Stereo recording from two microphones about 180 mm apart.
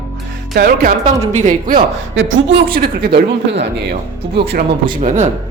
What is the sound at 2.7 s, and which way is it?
Speech, 60° right (ahead or behind).